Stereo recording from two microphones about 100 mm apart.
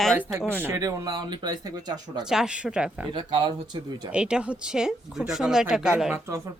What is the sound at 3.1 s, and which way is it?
Speech, 50° right (ahead or behind).